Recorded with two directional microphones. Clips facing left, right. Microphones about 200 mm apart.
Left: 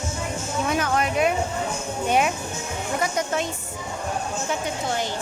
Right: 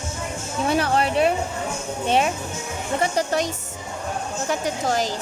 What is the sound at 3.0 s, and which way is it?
Speech, 35° right (ahead or behind).